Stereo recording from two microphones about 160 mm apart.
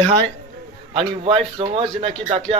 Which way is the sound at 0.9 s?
40° right (ahead or behind).